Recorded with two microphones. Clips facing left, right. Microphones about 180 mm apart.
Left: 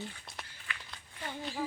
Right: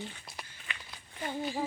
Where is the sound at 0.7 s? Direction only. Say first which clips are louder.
Left 1 dB; 20° right (ahead or behind).